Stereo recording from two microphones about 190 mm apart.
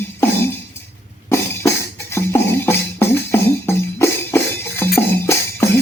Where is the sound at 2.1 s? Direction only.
10° left (ahead or behind).